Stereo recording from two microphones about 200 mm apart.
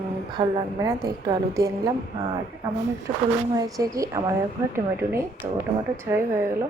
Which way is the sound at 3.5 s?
15° right (ahead or behind).